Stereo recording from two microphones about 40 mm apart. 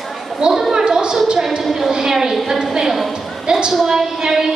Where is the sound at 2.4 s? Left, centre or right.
Centre.